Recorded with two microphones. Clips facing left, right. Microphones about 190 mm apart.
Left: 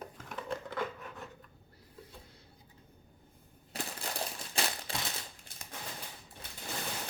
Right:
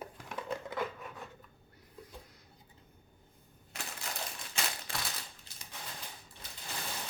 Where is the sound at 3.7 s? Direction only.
35° left (ahead or behind).